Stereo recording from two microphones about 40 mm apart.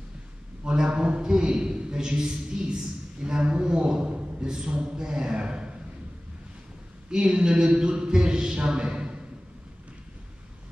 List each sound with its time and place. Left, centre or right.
0.7 s a woman's voice: right
7.1 s speech: centre